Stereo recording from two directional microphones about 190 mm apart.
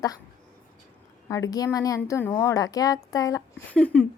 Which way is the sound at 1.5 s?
20° left (ahead or behind).